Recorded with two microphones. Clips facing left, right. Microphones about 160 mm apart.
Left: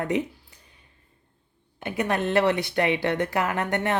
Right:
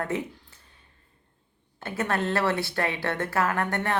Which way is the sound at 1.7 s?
15° left (ahead or behind).